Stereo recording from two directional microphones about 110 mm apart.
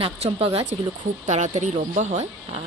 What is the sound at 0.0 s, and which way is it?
Speech, 60° right (ahead or behind).